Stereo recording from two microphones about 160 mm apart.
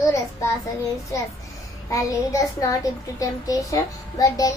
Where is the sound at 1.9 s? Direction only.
20° left (ahead or behind).